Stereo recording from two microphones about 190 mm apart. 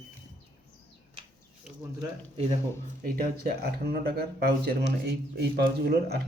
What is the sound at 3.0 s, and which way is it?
A man's voice, 55° right (ahead or behind).